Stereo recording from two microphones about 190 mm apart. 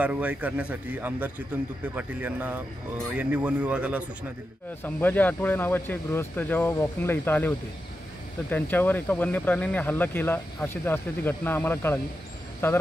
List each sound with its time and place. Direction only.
0.0 s speech: 10° right (ahead or behind)
4.8 s speech: 10° left (ahead or behind)